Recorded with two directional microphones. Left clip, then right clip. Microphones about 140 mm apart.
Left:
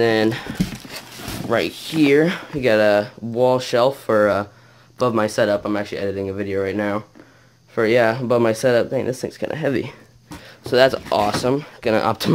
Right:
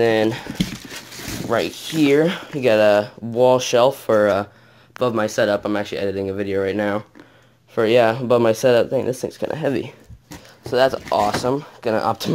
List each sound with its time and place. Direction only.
0.0 s speech: centre (ahead or behind)
4.9 s speech: 5° left (ahead or behind)
5.5 s speech: 15° right (ahead or behind)
7.7 s speech: 5° right (ahead or behind)
10.7 s speech: 25° left (ahead or behind)